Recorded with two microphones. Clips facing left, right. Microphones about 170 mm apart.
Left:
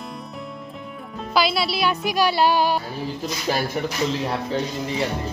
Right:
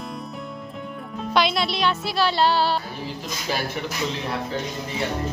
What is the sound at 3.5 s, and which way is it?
Speech, 45° left (ahead or behind).